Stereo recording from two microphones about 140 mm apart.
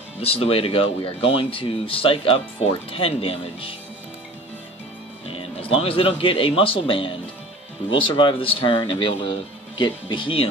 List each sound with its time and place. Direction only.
0.2 s speech: 45° left (ahead or behind)
5.3 s speech: 40° left (ahead or behind)